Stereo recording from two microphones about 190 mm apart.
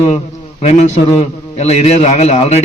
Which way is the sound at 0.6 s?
35° left (ahead or behind).